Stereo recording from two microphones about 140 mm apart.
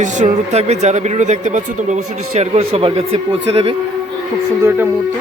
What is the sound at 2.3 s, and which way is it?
Speech, 45° right (ahead or behind).